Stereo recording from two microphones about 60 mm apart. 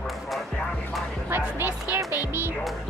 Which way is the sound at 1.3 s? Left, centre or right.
Right.